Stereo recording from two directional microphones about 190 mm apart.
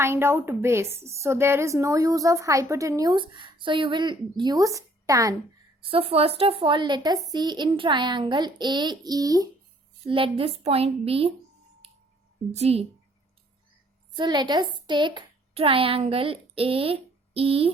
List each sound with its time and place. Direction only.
0.0 s a woman's voice: 15° right (ahead or behind)
5.8 s a woman's voice: 30° right (ahead or behind)
12.5 s a woman's voice: 35° right (ahead or behind)
14.2 s a woman's voice: 25° right (ahead or behind)